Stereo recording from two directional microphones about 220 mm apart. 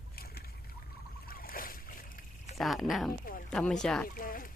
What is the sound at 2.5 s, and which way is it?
Speech, centre (ahead or behind).